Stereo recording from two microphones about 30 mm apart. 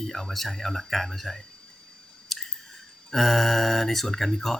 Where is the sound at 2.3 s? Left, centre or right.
Centre.